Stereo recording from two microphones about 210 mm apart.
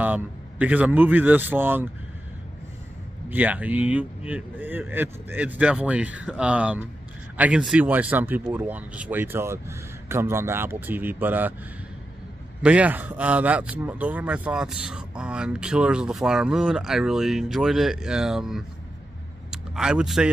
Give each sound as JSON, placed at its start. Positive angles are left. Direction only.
{"t": 0.0, "sound": "speech", "side_deg": -5}
{"t": 3.3, "sound": "speech", "side_deg": -10}
{"t": 12.6, "sound": "speech", "side_deg": -5}